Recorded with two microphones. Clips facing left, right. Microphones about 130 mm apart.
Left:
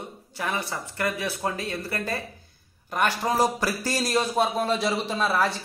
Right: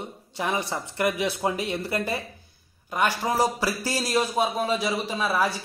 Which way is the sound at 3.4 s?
10° right (ahead or behind).